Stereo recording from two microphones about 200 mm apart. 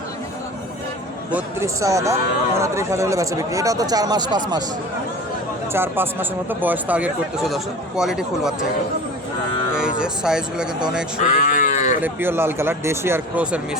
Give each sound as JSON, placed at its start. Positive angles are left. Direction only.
{"t": 1.3, "sound": "speech", "side_deg": -10}
{"t": 5.7, "sound": "speech", "side_deg": -10}
{"t": 9.7, "sound": "speech", "side_deg": -5}
{"t": 11.2, "sound": "sheep", "side_deg": 35}
{"t": 12.0, "sound": "speech", "side_deg": -10}